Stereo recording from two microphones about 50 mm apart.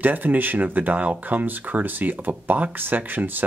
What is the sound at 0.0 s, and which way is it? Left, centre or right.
Speech, right.